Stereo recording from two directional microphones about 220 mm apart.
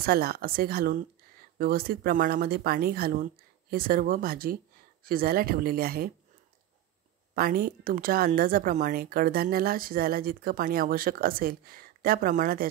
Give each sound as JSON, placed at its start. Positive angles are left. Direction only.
{"t": 0.0, "sound": "a woman's voice", "side_deg": -45}
{"t": 7.3, "sound": "a woman's voice", "side_deg": -45}